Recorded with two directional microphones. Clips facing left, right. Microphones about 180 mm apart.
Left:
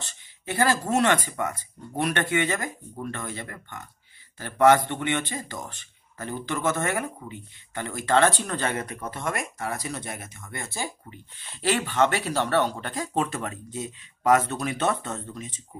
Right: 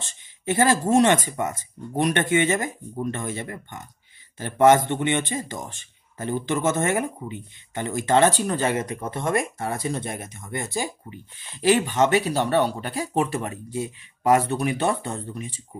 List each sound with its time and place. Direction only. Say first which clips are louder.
0.0 s speech: right 7 dB; 20° right (ahead or behind)